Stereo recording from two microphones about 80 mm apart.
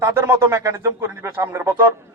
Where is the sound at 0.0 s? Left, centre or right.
Right.